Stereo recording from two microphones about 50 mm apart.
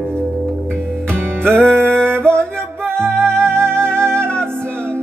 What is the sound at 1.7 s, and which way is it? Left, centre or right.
Music, left.